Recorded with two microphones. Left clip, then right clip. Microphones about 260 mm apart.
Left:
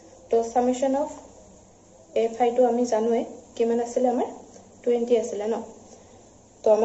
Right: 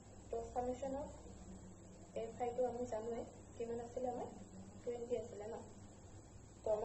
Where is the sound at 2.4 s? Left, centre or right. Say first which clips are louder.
Left 18 dB; left.